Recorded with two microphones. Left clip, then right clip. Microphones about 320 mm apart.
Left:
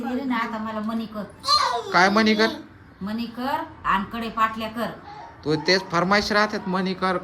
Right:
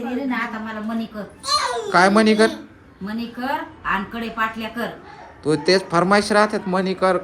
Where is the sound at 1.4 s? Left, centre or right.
Left.